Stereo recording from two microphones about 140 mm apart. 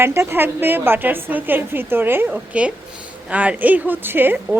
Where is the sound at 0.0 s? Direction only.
15° right (ahead or behind).